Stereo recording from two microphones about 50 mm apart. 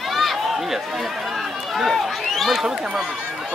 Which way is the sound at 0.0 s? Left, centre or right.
Centre.